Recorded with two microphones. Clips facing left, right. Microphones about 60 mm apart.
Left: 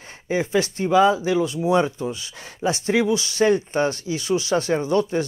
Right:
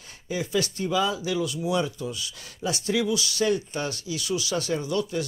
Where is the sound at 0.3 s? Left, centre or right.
Left.